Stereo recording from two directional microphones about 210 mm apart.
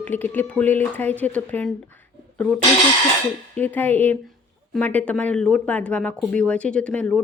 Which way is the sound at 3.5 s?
10° left (ahead or behind).